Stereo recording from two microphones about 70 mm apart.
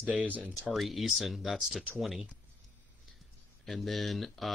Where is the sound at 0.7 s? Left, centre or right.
Centre.